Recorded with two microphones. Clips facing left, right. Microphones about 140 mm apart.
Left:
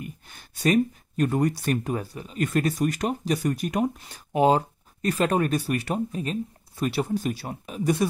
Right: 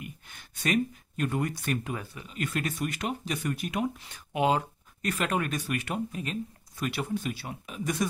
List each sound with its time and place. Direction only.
0.6 s speech: 40° left (ahead or behind)